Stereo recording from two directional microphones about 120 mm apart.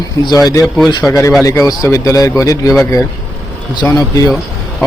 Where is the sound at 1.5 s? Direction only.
30° left (ahead or behind).